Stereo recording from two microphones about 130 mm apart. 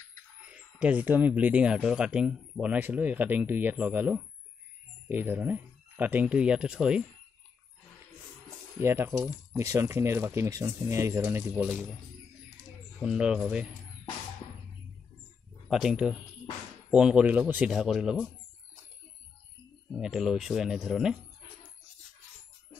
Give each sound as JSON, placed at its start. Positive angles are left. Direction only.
{"t": 0.5, "sound": "speech", "side_deg": -10}
{"t": 8.7, "sound": "speech", "side_deg": -20}
{"t": 12.5, "sound": "a sound", "side_deg": -5}
{"t": 15.7, "sound": "speech", "side_deg": -5}
{"t": 20.0, "sound": "speech", "side_deg": -5}